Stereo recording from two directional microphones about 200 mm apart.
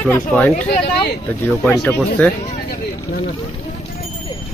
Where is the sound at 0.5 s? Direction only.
40° left (ahead or behind).